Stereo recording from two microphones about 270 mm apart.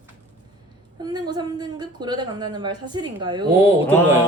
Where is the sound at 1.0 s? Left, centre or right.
Centre.